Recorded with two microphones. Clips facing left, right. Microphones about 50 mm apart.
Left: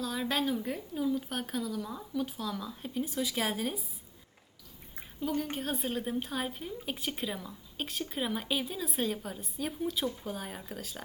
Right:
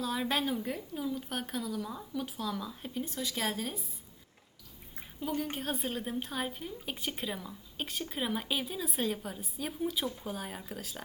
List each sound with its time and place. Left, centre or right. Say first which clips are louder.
0.0 s a woman's voice: even; centre
4.9 s a woman's voice: left 2 dB; centre